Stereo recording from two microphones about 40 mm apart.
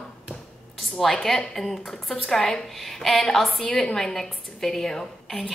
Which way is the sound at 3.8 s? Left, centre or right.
Centre.